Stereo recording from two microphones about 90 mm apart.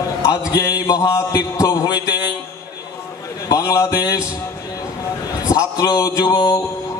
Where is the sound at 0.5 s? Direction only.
40° left (ahead or behind).